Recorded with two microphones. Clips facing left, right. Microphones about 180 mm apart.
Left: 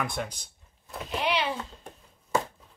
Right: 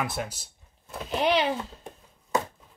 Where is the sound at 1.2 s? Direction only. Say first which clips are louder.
Right 5 dB; 40° right (ahead or behind).